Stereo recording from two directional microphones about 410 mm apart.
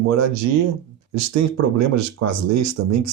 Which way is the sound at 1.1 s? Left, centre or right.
Right.